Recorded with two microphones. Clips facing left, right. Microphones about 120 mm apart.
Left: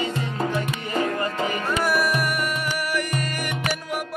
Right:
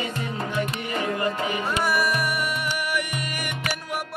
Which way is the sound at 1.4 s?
5° right (ahead or behind).